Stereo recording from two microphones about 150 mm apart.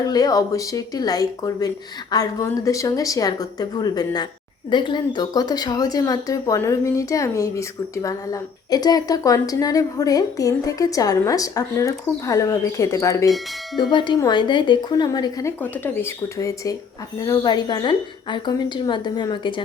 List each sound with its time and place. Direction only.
0.0 s a woman's voice: 25° left (ahead or behind)
13.9 s a woman's voice: 30° left (ahead or behind)